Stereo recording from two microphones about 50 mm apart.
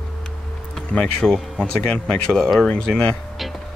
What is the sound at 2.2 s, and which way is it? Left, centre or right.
Speech, centre.